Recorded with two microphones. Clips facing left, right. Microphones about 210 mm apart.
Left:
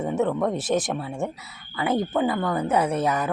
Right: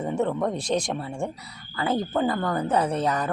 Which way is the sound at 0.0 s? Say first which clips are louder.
Left 2 dB; 5° left (ahead or behind).